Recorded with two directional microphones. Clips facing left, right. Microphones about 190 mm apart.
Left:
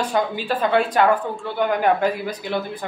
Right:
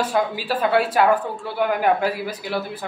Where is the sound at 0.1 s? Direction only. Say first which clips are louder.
Even; 5° right (ahead or behind).